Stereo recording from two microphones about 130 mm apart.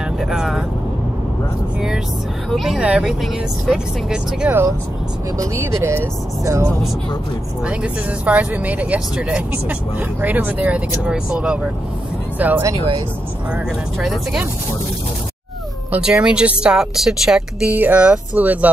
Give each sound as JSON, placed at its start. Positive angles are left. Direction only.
{"t": 0.2, "sound": "speech", "side_deg": -5}
{"t": 2.5, "sound": "speech", "side_deg": 0}
{"t": 5.4, "sound": "speech", "side_deg": -20}
{"t": 7.6, "sound": "speech", "side_deg": -10}
{"t": 13.9, "sound": "speech", "side_deg": 0}
{"t": 15.9, "sound": "speech", "side_deg": -5}